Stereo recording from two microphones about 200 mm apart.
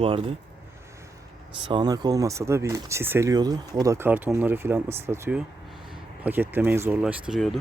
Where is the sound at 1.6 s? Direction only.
25° right (ahead or behind); by 7.5 s centre (ahead or behind).